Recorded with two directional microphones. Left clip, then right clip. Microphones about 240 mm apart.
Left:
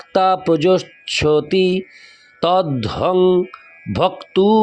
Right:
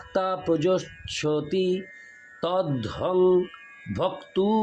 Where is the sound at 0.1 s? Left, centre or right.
Left.